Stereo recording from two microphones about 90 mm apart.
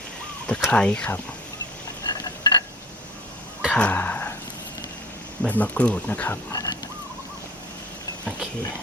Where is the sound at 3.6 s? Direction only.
15° left (ahead or behind).